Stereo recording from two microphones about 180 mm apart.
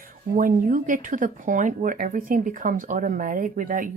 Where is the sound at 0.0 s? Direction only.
50° right (ahead or behind).